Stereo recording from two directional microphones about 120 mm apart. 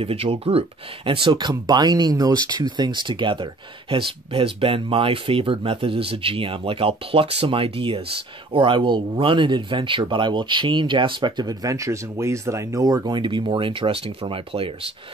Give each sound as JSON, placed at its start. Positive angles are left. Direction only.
{"t": 0.0, "sound": "speech", "side_deg": -55}